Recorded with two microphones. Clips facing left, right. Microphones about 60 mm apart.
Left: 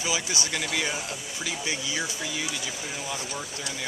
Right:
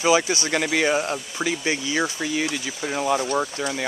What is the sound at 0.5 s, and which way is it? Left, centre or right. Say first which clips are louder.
Speech: right 9 dB; right.